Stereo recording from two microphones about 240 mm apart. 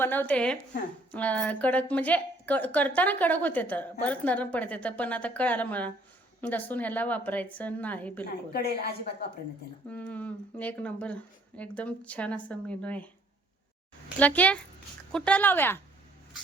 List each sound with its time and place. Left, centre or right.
0.0 s a woman's voice: centre
8.5 s a woman's voice: left
9.9 s speech: centre
14.2 s a woman's voice: centre